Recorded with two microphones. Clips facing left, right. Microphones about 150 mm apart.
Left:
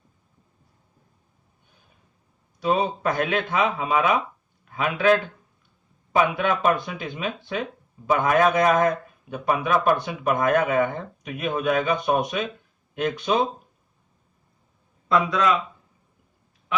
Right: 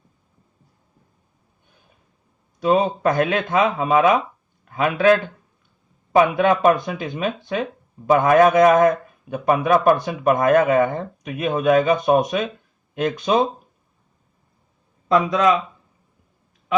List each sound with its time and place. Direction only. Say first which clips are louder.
2.6 s speech: right 5 dB; 45° right (ahead or behind)